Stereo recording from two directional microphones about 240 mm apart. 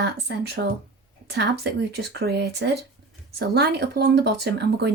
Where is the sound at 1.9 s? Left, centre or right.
Right.